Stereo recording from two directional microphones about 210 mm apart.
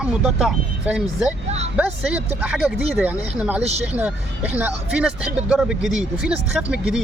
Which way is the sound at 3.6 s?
30° right (ahead or behind).